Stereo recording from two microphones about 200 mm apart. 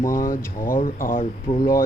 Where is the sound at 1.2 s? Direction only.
30° left (ahead or behind).